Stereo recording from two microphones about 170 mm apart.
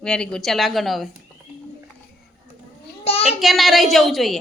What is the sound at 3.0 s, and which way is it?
Speech, 35° left (ahead or behind).